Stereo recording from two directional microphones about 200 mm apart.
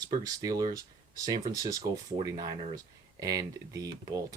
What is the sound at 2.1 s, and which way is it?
Speech, 20° right (ahead or behind).